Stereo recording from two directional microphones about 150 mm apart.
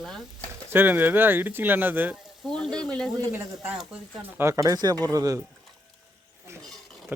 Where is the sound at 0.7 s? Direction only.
15° right (ahead or behind); by 3.1 s 5° left (ahead or behind).